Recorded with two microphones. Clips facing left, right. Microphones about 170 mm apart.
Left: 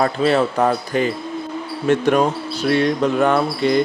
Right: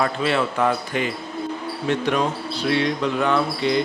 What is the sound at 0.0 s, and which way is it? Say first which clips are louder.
Speech: left 5 dB; 40° left (ahead or behind).